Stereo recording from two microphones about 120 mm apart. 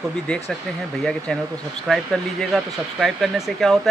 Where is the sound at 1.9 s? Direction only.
Centre (ahead or behind).